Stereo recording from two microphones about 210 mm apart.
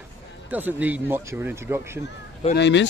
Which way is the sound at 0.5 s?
10° right (ahead or behind).